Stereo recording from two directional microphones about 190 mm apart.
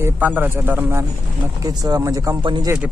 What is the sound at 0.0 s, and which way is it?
Speech, 10° right (ahead or behind).